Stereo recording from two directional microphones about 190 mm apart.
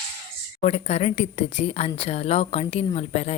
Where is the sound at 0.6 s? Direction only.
35° left (ahead or behind).